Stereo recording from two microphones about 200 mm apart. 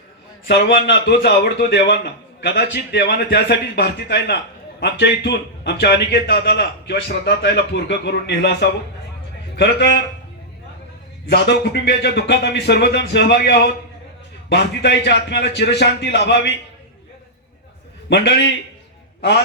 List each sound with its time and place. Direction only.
0.4 s a man's voice: 55° left (ahead or behind)
11.3 s a man's voice: 55° left (ahead or behind)
18.1 s a man's voice: 60° left (ahead or behind)